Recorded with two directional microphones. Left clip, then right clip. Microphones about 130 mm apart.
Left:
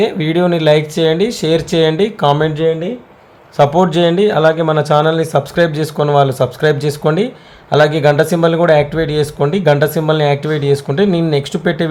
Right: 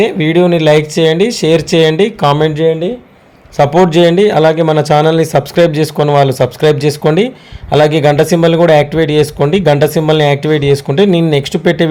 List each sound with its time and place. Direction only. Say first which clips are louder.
0.0 s speech: right 4 dB; 15° right (ahead or behind)